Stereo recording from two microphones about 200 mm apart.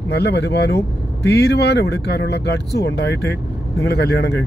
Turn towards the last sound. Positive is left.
turn(degrees=55)  # may be behind; listen again after turning